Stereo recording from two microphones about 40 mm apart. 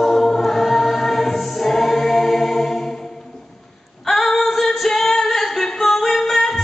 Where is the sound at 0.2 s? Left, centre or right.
Centre.